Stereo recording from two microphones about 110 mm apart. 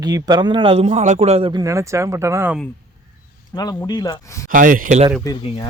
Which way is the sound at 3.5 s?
35° left (ahead or behind).